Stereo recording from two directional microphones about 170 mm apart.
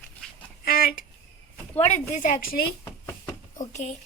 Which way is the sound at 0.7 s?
60° left (ahead or behind).